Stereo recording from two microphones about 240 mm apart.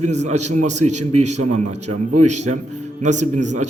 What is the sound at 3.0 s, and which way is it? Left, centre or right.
Speech, right.